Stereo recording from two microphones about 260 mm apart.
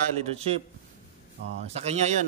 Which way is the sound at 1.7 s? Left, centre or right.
Right.